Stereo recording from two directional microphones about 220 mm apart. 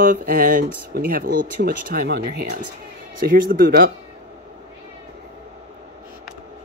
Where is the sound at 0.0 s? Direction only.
40° right (ahead or behind).